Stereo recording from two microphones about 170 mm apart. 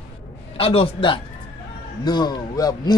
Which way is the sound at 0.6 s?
35° left (ahead or behind).